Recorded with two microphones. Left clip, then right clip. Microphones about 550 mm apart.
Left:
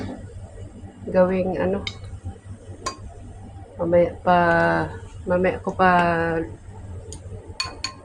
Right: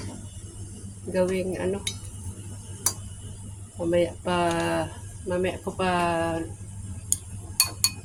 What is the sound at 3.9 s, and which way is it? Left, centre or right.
Speech, right.